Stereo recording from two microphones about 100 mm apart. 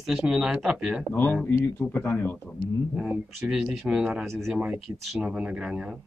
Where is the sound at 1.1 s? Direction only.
15° left (ahead or behind).